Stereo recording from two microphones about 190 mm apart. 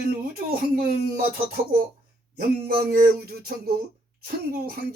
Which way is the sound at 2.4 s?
55° right (ahead or behind).